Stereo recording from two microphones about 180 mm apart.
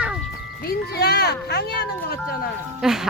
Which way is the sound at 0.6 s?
60° left (ahead or behind).